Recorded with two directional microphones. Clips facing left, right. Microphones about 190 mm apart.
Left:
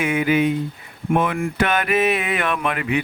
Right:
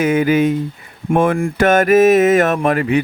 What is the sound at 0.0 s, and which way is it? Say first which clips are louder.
Mantra: right 5 dB; 40° right (ahead or behind).